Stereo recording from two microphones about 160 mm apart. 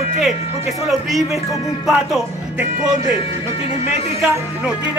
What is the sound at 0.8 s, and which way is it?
Speech, centre (ahead or behind).